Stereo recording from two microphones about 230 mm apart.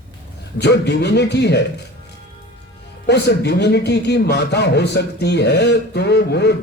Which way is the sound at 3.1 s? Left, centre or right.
Left.